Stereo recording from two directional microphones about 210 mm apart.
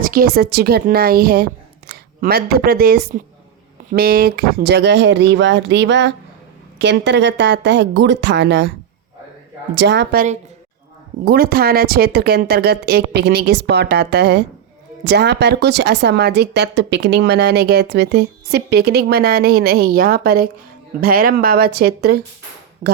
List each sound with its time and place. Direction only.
0.0 s speech: 45° right (ahead or behind)
9.7 s speech: 55° right (ahead or behind)
11.3 s speech: 45° right (ahead or behind)